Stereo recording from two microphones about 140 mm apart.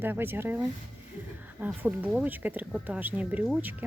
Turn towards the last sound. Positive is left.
turn(degrees=-10)  # may be behind; listen again after turning